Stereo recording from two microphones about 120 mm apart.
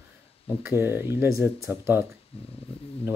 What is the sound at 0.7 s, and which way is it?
Speech, 20° right (ahead or behind).